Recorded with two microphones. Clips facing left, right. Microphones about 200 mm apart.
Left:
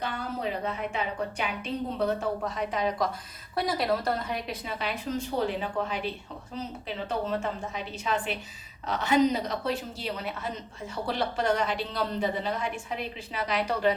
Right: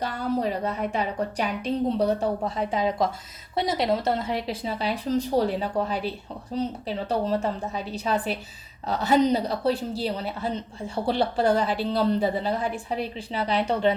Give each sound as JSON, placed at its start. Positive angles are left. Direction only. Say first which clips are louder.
{"t": 0.0, "sound": "a woman's voice", "louder": "right 6 dB", "side_deg": -40}
{"t": 2.6, "sound": "a woman's voice", "louder": "right 5 dB", "side_deg": -30}